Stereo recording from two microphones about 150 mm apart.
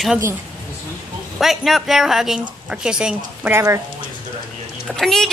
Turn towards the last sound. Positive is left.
turn(degrees=0)  # may be behind; listen again after turning